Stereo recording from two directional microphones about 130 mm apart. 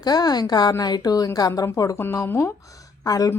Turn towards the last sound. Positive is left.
turn(degrees=30)  # may be behind; listen again after turning